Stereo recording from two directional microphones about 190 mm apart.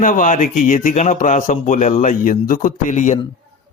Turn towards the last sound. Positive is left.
turn(degrees=40)  # may be behind; listen again after turning